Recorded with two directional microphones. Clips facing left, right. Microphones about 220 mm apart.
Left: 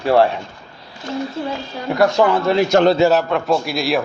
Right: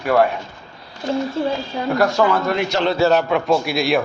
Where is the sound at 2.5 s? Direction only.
45° left (ahead or behind).